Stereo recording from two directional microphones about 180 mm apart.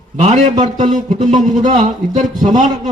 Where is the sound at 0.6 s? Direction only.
45° right (ahead or behind).